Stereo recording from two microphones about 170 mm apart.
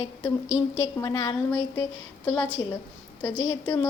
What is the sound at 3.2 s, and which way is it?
Speech, 10° left (ahead or behind).